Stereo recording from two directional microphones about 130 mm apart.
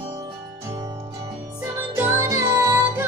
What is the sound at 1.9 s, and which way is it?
Music, 20° right (ahead or behind).